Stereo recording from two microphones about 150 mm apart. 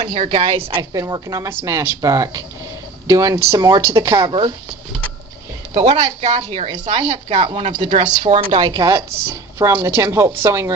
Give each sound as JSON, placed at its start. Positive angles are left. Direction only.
{"t": 0.0, "sound": "speech", "side_deg": -40}
{"t": 0.8, "sound": "speech", "side_deg": -25}
{"t": 4.3, "sound": "speech", "side_deg": -35}
{"t": 5.8, "sound": "speech", "side_deg": -50}
{"t": 7.8, "sound": "a woman's voice", "side_deg": -50}